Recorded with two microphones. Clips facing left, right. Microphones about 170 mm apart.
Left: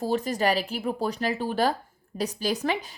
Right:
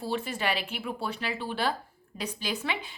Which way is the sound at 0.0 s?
40° left (ahead or behind).